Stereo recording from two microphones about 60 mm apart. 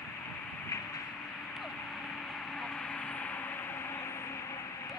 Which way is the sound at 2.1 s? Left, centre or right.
Centre.